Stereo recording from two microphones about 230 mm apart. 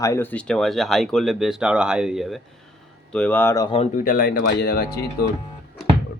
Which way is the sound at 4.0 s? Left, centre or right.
Left.